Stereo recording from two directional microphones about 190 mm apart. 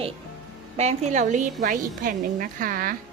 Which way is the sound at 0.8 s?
35° right (ahead or behind).